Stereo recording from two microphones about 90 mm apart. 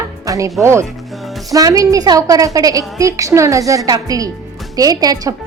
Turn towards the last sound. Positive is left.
turn(degrees=-45)  # may be behind; listen again after turning